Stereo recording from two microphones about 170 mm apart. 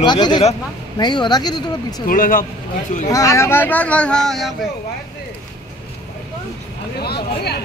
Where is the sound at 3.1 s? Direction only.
20° left (ahead or behind); by 4.5 s centre (ahead or behind).